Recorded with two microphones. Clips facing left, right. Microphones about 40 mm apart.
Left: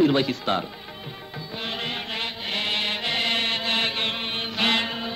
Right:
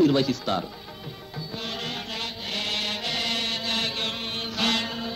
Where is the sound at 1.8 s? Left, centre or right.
Left.